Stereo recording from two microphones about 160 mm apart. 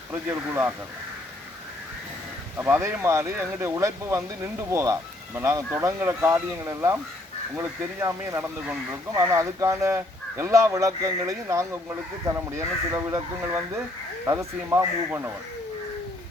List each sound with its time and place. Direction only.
0.1 s speech: 10° right (ahead or behind)
2.6 s speech: 10° right (ahead or behind)